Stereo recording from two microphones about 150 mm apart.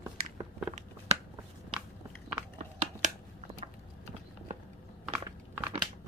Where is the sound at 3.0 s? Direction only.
55° right (ahead or behind).